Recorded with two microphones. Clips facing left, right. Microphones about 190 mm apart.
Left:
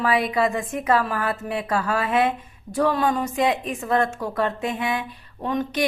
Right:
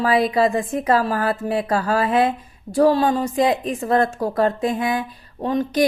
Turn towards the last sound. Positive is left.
turn(degrees=-35)  # may be behind; listen again after turning